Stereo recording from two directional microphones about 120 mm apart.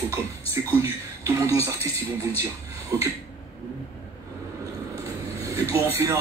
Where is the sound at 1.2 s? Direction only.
25° right (ahead or behind).